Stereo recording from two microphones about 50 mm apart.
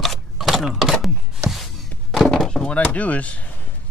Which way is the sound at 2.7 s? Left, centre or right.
Left.